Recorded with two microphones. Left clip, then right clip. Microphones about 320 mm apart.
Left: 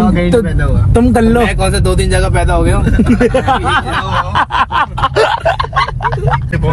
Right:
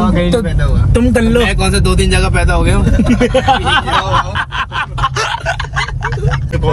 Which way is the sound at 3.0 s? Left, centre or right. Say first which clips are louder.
Left 1 dB; centre.